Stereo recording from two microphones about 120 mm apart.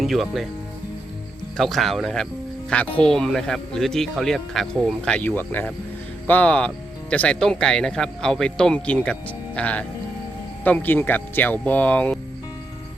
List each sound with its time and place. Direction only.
0.0 s speech: centre (ahead or behind)
1.5 s speech: centre (ahead or behind)